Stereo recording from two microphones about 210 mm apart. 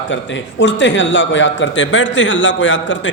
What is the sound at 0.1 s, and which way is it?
A man's voice, 60° left (ahead or behind).